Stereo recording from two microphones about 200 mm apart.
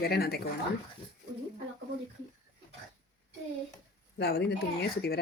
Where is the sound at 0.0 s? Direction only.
50° left (ahead or behind).